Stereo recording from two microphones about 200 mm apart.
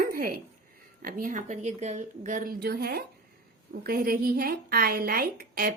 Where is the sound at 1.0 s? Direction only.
45° right (ahead or behind).